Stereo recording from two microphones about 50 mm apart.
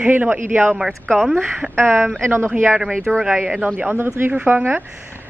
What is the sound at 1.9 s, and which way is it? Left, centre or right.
Speech, centre.